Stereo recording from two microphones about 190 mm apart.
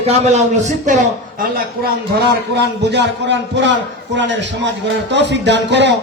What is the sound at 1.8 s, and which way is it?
A man's voice, 60° right (ahead or behind).